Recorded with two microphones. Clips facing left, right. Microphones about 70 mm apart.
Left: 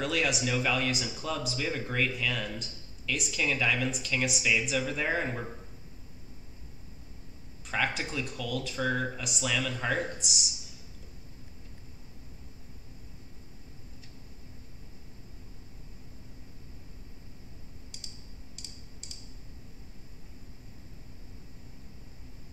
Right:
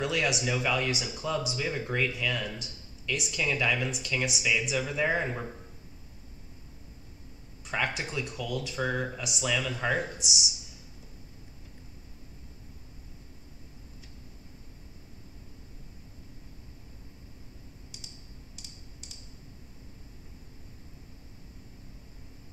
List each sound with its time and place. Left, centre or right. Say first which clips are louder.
0.0 s speech: right 1 dB; centre
7.6 s speech: even; centre
17.9 s typing: even; centre